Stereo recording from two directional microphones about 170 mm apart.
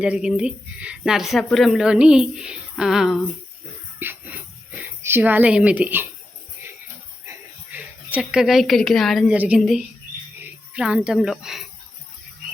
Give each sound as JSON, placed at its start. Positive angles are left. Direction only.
{"t": 0.0, "sound": "speech", "side_deg": -5}
{"t": 4.0, "sound": "jingle bell", "side_deg": -10}
{"t": 5.0, "sound": "a woman's voice", "side_deg": -10}
{"t": 7.3, "sound": "speech", "side_deg": -10}